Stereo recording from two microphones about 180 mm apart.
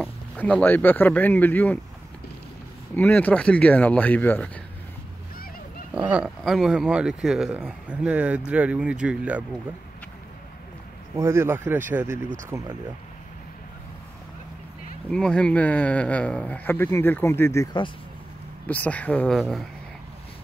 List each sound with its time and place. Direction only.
0.0 s speech: 10° left (ahead or behind)
3.0 s speech: 10° left (ahead or behind)
5.9 s speech: 5° right (ahead or behind)
11.1 s speech: 15° right (ahead or behind)
15.0 s speech: 5° left (ahead or behind)